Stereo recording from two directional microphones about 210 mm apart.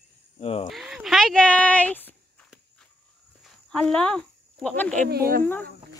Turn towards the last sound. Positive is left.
turn(degrees=-45)  # may be behind; listen again after turning